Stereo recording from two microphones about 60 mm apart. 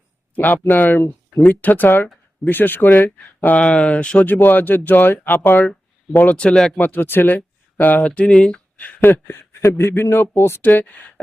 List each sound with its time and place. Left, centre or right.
0.3 s speech: left
3.6 s speech: centre
4.3 s speech: left
6.3 s speech: centre
6.7 s speech: left; by 8.6 s centre
8.8 s speech: left